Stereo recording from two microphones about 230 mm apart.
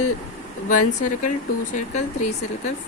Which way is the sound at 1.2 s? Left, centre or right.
Left.